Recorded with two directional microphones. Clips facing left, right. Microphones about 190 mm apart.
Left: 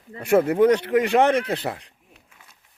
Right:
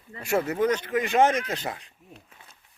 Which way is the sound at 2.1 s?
35° right (ahead or behind).